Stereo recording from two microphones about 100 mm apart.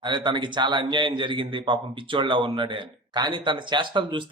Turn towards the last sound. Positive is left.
turn(degrees=-55)  # may be behind; listen again after turning